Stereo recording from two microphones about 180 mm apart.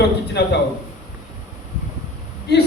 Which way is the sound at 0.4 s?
65° left (ahead or behind).